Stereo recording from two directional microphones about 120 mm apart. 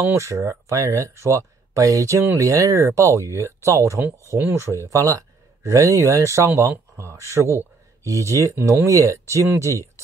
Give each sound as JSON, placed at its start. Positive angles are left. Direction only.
{"t": 0.0, "sound": "a man's voice", "side_deg": -25}